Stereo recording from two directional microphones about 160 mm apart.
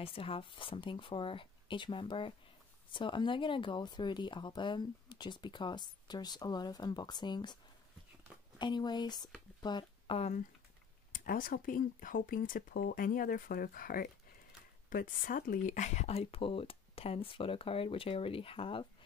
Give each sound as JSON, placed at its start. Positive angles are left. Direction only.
{"t": 0.0, "sound": "speech", "side_deg": 35}
{"t": 8.5, "sound": "speech", "side_deg": 25}
{"t": 11.1, "sound": "speech", "side_deg": 60}